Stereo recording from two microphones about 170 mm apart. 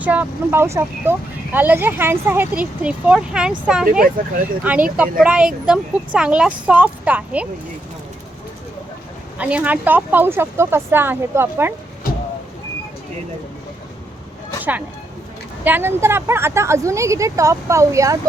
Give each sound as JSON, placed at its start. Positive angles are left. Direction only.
{"t": 0.0, "sound": "a woman's voice", "side_deg": -10}
{"t": 9.4, "sound": "a woman's voice", "side_deg": -10}
{"t": 15.6, "sound": "a woman's voice", "side_deg": -10}